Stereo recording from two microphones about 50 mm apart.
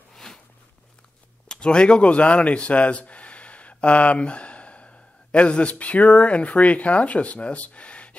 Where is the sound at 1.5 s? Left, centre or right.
Centre.